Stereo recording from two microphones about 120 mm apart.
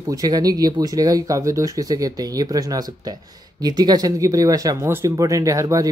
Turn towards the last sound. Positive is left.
turn(degrees=-25)  # may be behind; listen again after turning